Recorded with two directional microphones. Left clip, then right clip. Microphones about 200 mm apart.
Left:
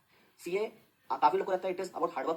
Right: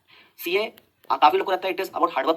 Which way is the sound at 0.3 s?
45° right (ahead or behind).